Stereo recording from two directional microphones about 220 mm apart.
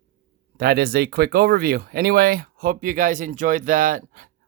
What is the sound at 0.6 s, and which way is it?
Speech, 45° right (ahead or behind).